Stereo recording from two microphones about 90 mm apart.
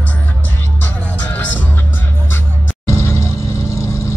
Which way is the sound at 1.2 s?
20° left (ahead or behind).